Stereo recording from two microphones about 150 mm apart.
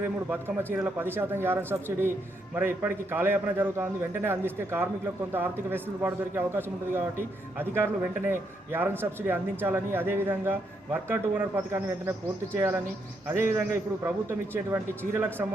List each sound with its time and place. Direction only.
0.3 s a man's voice: 15° right (ahead or behind)